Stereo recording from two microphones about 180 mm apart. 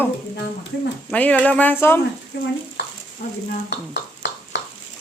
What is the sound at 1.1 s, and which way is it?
Speech, 10° left (ahead or behind).